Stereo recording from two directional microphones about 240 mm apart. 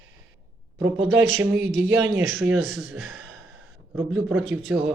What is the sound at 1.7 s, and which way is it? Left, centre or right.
Speech, right.